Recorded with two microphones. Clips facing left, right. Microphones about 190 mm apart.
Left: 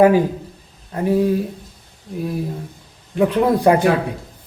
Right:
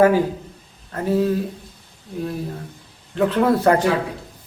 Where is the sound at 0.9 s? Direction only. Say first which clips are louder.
Left 2 dB; 15° left (ahead or behind).